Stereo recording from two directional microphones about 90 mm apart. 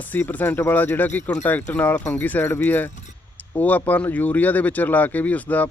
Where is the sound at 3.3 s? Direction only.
20° left (ahead or behind).